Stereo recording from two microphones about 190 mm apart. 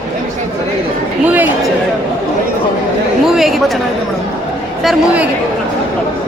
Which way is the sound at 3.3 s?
Centre (ahead or behind).